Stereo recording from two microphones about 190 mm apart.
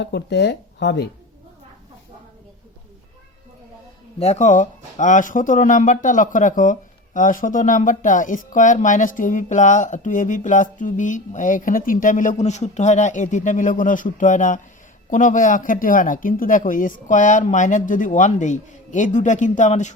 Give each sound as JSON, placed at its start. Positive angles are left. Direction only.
{"t": 0.0, "sound": "speech", "side_deg": 65}
{"t": 4.2, "sound": "speech", "side_deg": 35}